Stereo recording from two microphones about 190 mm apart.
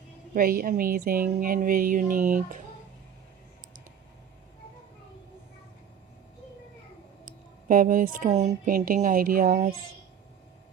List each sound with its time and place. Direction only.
0.3 s speech: 50° right (ahead or behind)
7.3 s speech: 45° right (ahead or behind)